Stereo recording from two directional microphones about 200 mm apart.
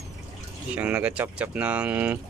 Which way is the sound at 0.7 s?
5° right (ahead or behind).